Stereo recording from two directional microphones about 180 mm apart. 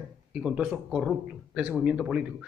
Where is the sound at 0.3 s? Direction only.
5° right (ahead or behind).